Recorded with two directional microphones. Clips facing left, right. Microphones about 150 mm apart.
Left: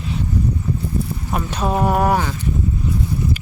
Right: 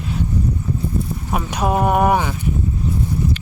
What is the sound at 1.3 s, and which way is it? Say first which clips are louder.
Speech: right 1 dB; 10° right (ahead or behind).